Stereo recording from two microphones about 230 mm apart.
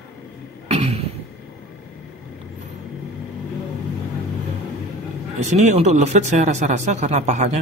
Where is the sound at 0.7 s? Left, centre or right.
Right.